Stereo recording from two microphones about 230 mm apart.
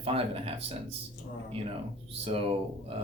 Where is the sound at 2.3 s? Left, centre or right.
Right.